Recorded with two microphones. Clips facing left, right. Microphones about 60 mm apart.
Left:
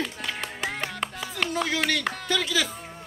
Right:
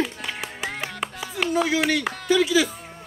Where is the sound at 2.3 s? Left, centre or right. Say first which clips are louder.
Right 8 dB; centre.